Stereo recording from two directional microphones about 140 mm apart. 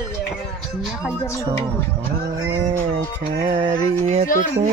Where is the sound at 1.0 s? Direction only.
20° left (ahead or behind).